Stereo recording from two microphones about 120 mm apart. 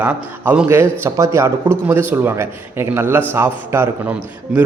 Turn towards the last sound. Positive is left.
turn(degrees=-5)  # may be behind; listen again after turning